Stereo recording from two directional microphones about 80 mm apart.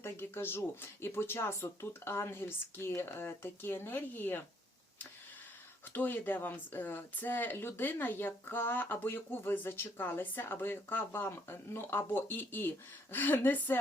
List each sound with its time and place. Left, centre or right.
0.0 s speech: left
5.9 s speech: left